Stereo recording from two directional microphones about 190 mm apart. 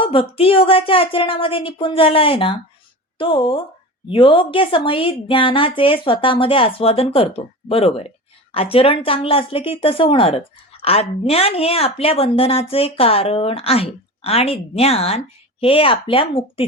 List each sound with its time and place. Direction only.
0.0 s a woman's voice: 30° left (ahead or behind)